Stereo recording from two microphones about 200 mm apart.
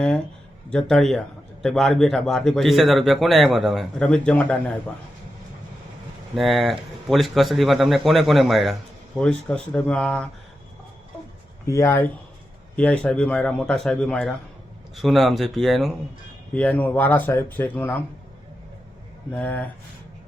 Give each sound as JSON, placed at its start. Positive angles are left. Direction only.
{"t": 0.7, "sound": "a man's voice", "side_deg": 5}
{"t": 6.3, "sound": "a man's voice", "side_deg": 0}
{"t": 11.6, "sound": "a man's voice", "side_deg": 15}
{"t": 19.3, "sound": "speech", "side_deg": 10}